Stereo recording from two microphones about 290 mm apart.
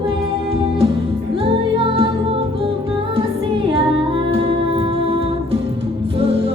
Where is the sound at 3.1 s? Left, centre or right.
Centre.